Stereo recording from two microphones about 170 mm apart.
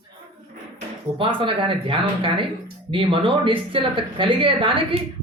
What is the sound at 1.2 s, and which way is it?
Speech, 30° right (ahead or behind).